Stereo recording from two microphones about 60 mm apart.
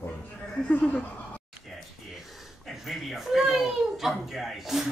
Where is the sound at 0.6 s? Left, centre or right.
Left.